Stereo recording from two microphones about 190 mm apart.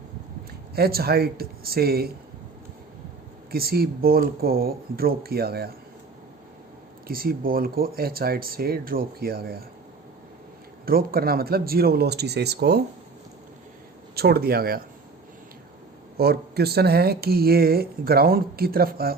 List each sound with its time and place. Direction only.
0.8 s speech: 55° right (ahead or behind)
3.5 s speech: 55° right (ahead or behind)
7.1 s speech: 50° right (ahead or behind)
10.8 s speech: 50° right (ahead or behind)
14.2 s speech: 55° right (ahead or behind)
16.1 s speech: 55° right (ahead or behind)